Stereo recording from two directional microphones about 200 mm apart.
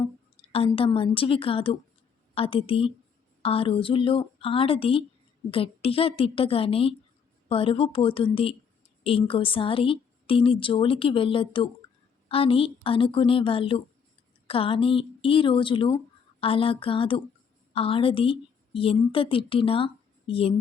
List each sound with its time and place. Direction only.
0.5 s a woman's voice: 30° left (ahead or behind)